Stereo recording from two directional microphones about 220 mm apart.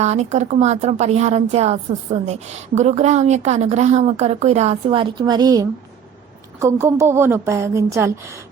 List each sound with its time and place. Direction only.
0.0 s a woman's voice: 30° right (ahead or behind); by 8.4 s 15° right (ahead or behind)